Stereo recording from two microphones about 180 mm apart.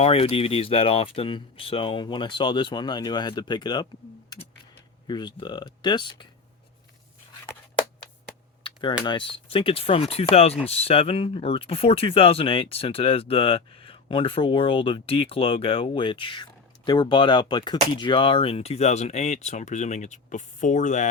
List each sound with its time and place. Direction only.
0.0 s speech: 35° left (ahead or behind)
5.0 s speech: 25° left (ahead or behind)
8.6 s a sound: 25° left (ahead or behind)
9.0 s speech: 30° left (ahead or behind)